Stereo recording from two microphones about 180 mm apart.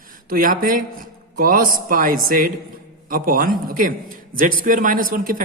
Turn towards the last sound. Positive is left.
turn(degrees=-50)  # may be behind; listen again after turning